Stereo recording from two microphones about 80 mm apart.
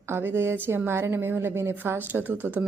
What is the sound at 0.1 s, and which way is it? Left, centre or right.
A woman's voice, right.